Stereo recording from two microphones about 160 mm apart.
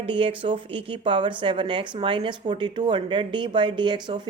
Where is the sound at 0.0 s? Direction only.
35° right (ahead or behind).